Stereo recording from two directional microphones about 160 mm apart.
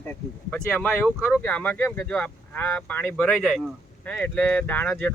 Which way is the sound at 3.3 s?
Centre (ahead or behind).